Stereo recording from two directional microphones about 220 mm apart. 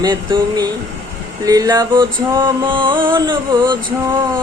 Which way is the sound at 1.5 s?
15° right (ahead or behind).